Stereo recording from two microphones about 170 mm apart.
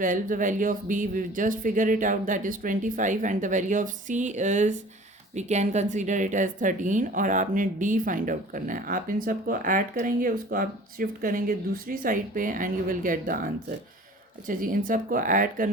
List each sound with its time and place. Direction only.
0.0 s speech: 50° right (ahead or behind)